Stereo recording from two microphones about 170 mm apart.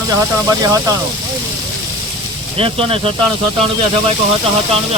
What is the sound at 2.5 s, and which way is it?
Speech, 35° right (ahead or behind).